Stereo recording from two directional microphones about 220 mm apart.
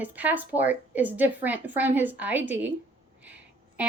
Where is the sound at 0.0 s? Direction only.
5° right (ahead or behind).